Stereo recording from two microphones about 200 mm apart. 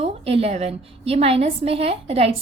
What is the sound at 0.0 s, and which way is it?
A woman's voice, 30° right (ahead or behind).